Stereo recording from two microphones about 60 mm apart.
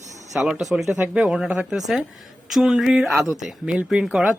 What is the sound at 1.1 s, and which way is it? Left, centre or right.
Speech, centre.